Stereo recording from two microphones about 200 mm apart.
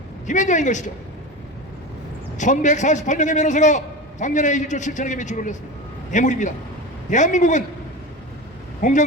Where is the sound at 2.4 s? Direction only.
40° left (ahead or behind).